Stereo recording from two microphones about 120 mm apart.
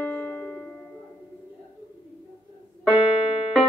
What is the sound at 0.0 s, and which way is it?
Music, 10° left (ahead or behind).